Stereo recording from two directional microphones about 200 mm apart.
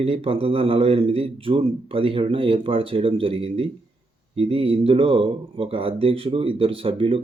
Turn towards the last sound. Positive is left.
turn(degrees=-25)  # may be behind; listen again after turning